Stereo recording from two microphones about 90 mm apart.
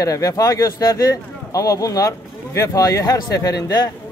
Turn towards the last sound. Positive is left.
turn(degrees=45)  # may be behind; listen again after turning